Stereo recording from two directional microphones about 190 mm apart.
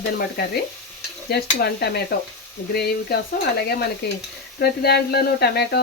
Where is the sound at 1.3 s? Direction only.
55° left (ahead or behind).